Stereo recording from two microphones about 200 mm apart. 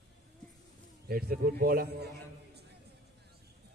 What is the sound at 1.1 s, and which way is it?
A man's voice, 50° right (ahead or behind).